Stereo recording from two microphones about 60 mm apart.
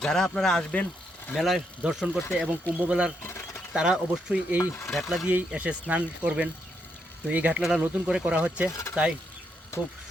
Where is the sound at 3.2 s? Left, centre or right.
Left.